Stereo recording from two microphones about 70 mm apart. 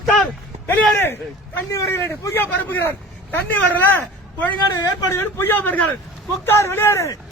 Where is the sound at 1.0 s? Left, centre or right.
Left.